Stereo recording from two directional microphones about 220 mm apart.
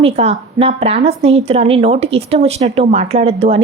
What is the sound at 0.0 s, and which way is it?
A woman's voice, 25° right (ahead or behind).